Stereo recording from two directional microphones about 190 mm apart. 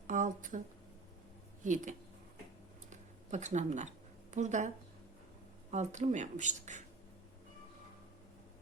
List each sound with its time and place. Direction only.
0.1 s speech: 45° right (ahead or behind)
1.6 s speech: 40° right (ahead or behind)
2.9 s a sound: 40° right (ahead or behind)
5.7 s speech: 35° right (ahead or behind)